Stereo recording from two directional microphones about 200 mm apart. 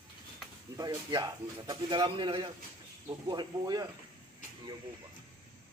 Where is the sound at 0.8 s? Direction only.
20° right (ahead or behind).